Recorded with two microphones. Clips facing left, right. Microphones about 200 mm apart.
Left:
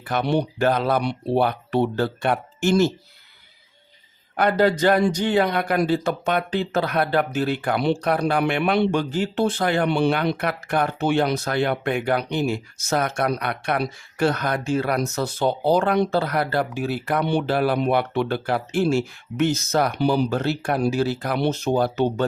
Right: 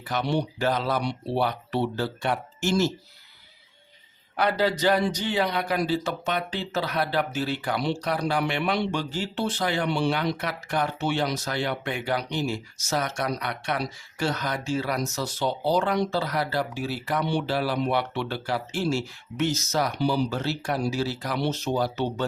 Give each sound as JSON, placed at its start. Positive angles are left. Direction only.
{"t": 0.1, "sound": "a man's voice", "side_deg": 55}
{"t": 4.4, "sound": "a man's voice", "side_deg": 50}